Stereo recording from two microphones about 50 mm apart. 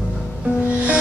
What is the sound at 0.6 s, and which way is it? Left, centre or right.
Music, right.